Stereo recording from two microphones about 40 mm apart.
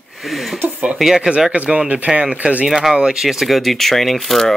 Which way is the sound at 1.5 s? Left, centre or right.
Right.